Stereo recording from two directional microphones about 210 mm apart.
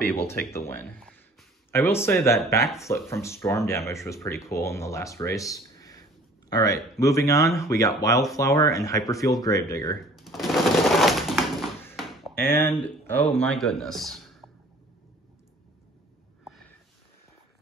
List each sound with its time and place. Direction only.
0.1 s speech: 10° left (ahead or behind)
10.1 s a sound: centre (ahead or behind)
12.4 s speech: 10° left (ahead or behind)